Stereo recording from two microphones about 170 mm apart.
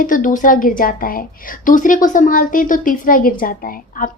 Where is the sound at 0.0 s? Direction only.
50° left (ahead or behind).